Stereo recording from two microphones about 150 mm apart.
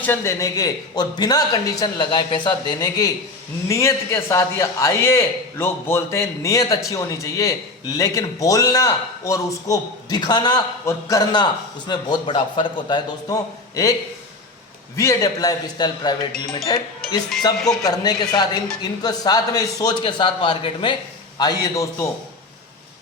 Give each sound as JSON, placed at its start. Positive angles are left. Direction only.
{"t": 0.0, "sound": "a man's voice", "side_deg": 15}
{"t": 14.9, "sound": "a man's voice", "side_deg": 20}